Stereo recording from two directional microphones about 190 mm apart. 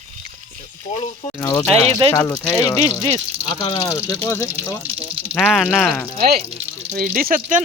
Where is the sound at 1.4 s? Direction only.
15° left (ahead or behind).